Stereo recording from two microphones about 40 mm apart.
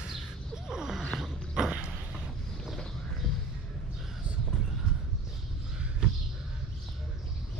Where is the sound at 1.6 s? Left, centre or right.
Right.